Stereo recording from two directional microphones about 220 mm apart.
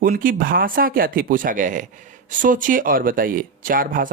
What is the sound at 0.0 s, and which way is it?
Speech, 40° right (ahead or behind).